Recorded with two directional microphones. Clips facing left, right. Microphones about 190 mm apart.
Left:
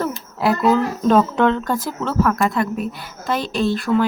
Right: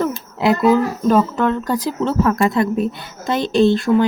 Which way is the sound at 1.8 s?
25° right (ahead or behind).